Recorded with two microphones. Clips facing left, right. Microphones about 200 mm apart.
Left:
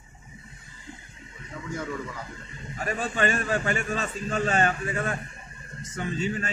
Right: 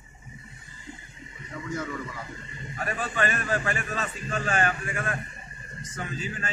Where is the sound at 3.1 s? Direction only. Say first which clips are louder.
Left 2 dB; 25° left (ahead or behind).